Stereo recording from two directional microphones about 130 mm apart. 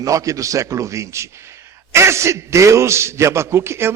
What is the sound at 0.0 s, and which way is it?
A man's voice, 25° right (ahead or behind).